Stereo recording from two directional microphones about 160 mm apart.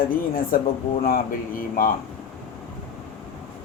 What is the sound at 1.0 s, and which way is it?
Speech, 65° left (ahead or behind).